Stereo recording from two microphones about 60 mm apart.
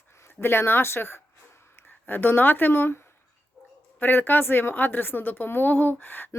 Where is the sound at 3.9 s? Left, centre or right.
Left.